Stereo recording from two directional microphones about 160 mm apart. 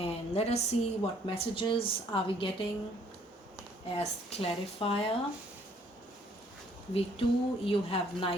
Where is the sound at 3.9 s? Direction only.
40° left (ahead or behind).